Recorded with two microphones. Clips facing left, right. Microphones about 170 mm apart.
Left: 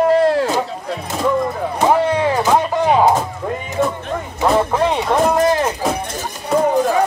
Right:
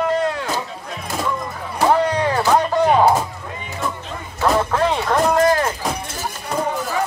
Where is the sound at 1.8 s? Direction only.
20° left (ahead or behind).